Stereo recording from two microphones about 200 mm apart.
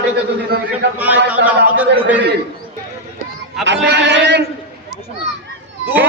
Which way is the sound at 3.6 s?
65° right (ahead or behind).